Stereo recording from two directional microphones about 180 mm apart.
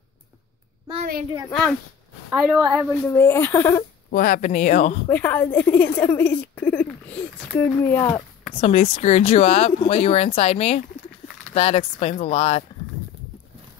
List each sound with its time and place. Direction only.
2.5 s a woman's voice: 10° right (ahead or behind)
3.1 s speech: 15° left (ahead or behind)
4.1 s speech: 50° left (ahead or behind)
5.0 s a woman's voice: 10° left (ahead or behind)
8.5 s speech: 35° left (ahead or behind)